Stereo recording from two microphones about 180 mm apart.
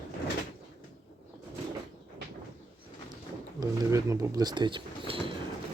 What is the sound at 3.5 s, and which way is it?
Speech, 20° right (ahead or behind).